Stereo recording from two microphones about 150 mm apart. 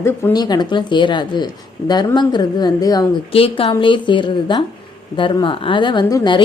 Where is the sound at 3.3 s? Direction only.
40° left (ahead or behind).